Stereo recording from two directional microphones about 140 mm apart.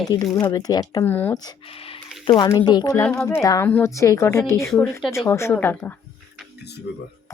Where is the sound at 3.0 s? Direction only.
15° left (ahead or behind).